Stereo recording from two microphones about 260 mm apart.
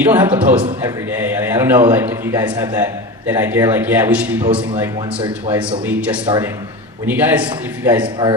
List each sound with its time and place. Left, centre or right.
0.0 s a man's voice: centre
4.4 s a man's voice: centre
4.8 s a man's voice: centre
6.2 s a man's voice: centre
8.0 s a man's voice: centre